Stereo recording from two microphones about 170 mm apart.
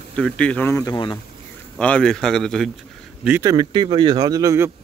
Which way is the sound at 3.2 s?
10° right (ahead or behind).